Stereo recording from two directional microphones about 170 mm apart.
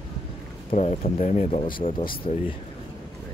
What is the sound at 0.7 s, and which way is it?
Speech, 35° left (ahead or behind).